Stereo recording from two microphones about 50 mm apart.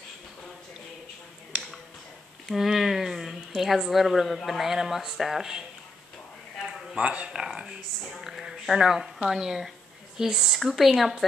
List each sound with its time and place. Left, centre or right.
1.5 s a sound: centre
2.5 s speech: centre
7.0 s speech: right
7.4 s a sound: centre
8.2 s speech: centre
10.6 s speech: centre